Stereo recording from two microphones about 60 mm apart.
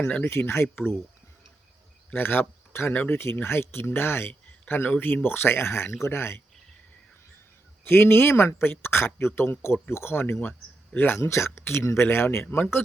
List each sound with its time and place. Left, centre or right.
0.0 s speech: left
0.3 s speech: left
2.1 s speech: left
2.9 s speech: left
3.4 s speech: left
7.9 s speech: left
11.2 s speech: left